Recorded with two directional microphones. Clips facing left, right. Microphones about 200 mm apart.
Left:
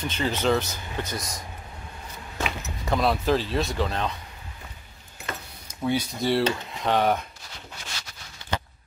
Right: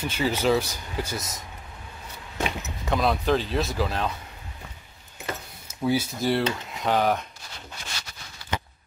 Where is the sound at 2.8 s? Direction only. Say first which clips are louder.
Even; centre (ahead or behind).